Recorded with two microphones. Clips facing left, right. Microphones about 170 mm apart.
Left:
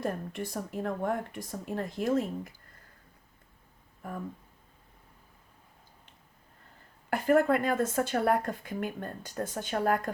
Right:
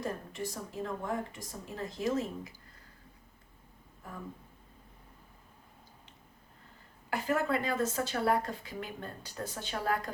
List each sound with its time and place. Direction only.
0.0 s speech: 55° left (ahead or behind)
7.1 s a woman's voice: 50° left (ahead or behind)